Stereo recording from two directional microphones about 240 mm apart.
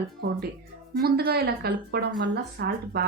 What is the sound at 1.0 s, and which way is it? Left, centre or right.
Speech, right.